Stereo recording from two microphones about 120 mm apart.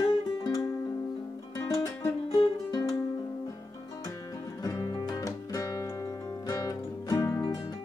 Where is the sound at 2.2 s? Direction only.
50° left (ahead or behind).